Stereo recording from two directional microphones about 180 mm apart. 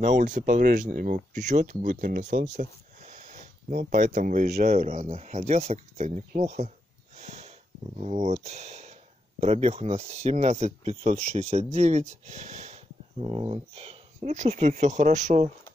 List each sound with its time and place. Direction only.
0.0 s speech: 40° right (ahead or behind)
4.8 s speech: 45° right (ahead or behind)
7.2 s snort: 40° right (ahead or behind)
8.0 s speech: 40° right (ahead or behind)